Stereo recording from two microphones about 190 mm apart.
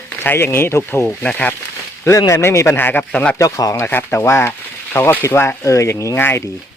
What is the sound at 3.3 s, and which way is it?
Speech, 15° left (ahead or behind).